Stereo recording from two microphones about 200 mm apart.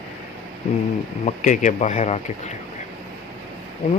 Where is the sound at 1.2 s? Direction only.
40° left (ahead or behind).